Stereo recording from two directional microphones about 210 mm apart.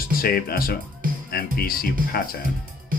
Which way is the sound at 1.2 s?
45° left (ahead or behind).